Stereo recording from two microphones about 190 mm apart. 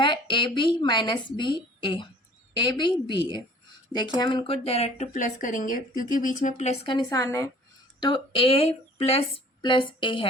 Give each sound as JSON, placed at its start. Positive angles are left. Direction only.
{"t": 0.0, "sound": "a woman's voice", "side_deg": 25}
{"t": 8.0, "sound": "a woman's voice", "side_deg": 25}